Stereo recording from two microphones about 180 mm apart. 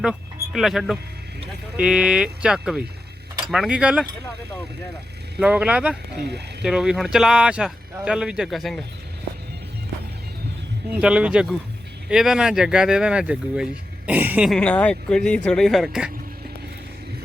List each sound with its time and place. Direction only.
0.0 s speech: 5° right (ahead or behind)
5.4 s speech: 5° right (ahead or behind)
6.1 s speech: 65° right (ahead or behind)
6.6 s speech: 5° right (ahead or behind)
10.9 s speech: 5° right (ahead or behind)
14.5 s speech: 5° left (ahead or behind)